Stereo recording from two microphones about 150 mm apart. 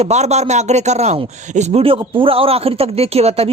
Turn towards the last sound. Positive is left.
turn(degrees=-45)  # may be behind; listen again after turning